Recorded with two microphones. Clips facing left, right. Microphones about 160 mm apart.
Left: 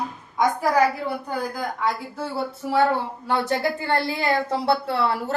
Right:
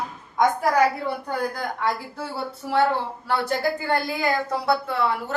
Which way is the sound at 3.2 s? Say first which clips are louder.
Left 1 dB; 20° left (ahead or behind).